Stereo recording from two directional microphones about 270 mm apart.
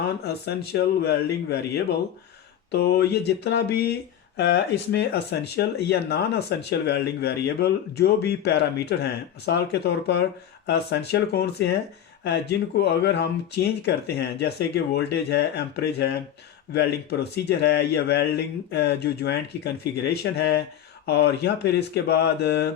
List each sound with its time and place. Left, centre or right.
0.4 s speech: left